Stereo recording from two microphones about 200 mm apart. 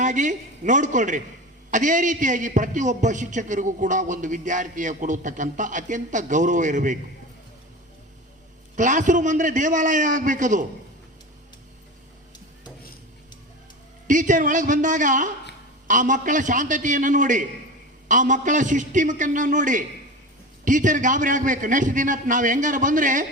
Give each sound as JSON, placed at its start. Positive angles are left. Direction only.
{"t": 0.0, "sound": "a man's voice", "side_deg": -40}
{"t": 8.7, "sound": "a man's voice", "side_deg": -40}
{"t": 14.1, "sound": "a man's voice", "side_deg": -40}